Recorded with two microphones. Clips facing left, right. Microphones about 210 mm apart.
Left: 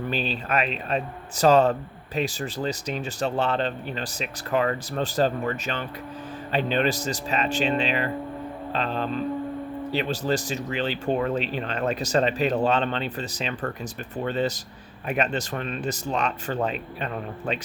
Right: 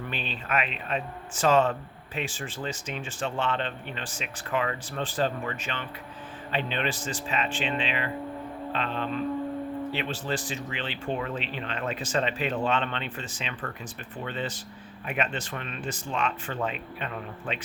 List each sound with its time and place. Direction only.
0.1 s speech: 35° left (ahead or behind)